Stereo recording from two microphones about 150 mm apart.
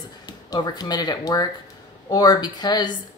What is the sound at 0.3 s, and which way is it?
A woman's voice, 25° left (ahead or behind).